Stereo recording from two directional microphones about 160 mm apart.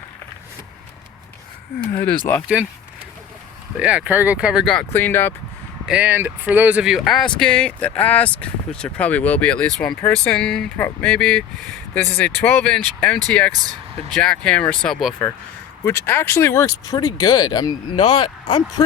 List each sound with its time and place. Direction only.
2.0 s speech: 10° left (ahead or behind)
3.8 s speech: 5° right (ahead or behind)
4.7 s speech: 10° left (ahead or behind)
5.9 s speech: 10° right (ahead or behind)
15.8 s speech: 15° left (ahead or behind)